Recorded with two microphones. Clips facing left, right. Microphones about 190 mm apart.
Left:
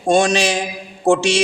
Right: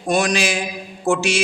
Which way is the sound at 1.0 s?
30° left (ahead or behind).